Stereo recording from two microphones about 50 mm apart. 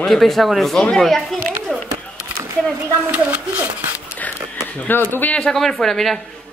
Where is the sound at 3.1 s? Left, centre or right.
Right.